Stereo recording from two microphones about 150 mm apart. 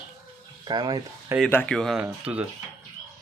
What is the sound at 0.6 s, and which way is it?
Speech, 30° right (ahead or behind).